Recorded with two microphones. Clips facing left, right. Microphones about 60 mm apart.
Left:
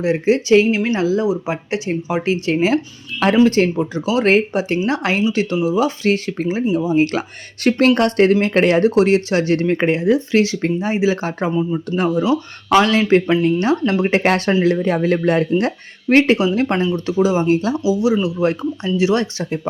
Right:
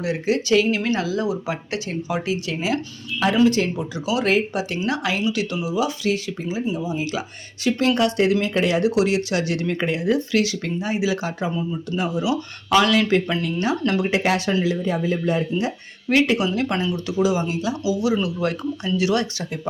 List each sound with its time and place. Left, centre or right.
0.0 s speech: left
12.2 s speech: left
16.0 s speech: left
17.7 s speech: left